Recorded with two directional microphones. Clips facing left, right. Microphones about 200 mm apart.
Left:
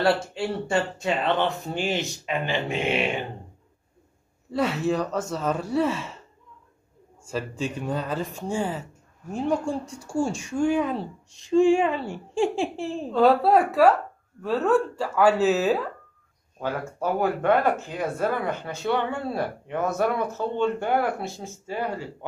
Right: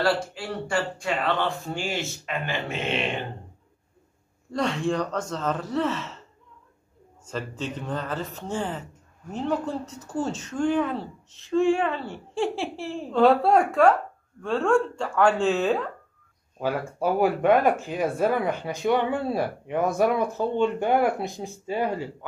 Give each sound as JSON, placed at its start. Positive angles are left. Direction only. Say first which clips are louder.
{"t": 0.0, "sound": "speech", "louder": "left 2 dB", "side_deg": 25}
{"t": 4.5, "sound": "speech", "louder": "left 1 dB", "side_deg": 5}
{"t": 7.2, "sound": "speech", "louder": "left 3 dB", "side_deg": 10}
{"t": 13.1, "sound": "speech", "louder": "even", "side_deg": 0}
{"t": 16.5, "sound": "speech", "louder": "right 2 dB", "side_deg": -10}